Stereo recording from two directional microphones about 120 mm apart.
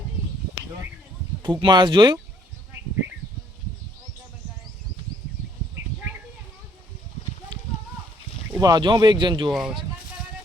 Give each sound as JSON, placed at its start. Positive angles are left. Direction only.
{"t": 1.6, "sound": "speech", "side_deg": -40}
{"t": 8.5, "sound": "speech", "side_deg": -35}
{"t": 9.5, "sound": "speech", "side_deg": 0}